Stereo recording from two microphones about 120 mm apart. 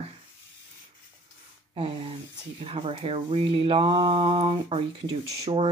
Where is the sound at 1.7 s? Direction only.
50° right (ahead or behind).